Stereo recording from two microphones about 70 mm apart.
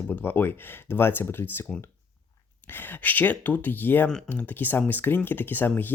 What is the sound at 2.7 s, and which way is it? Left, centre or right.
Speech, left.